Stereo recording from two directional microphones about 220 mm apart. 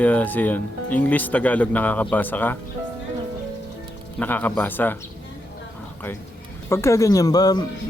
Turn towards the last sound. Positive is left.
turn(degrees=15)  # may be behind; listen again after turning